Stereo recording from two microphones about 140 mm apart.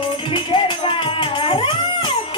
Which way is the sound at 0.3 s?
35° left (ahead or behind).